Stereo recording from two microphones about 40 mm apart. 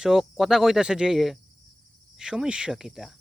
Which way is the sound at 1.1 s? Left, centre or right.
Centre.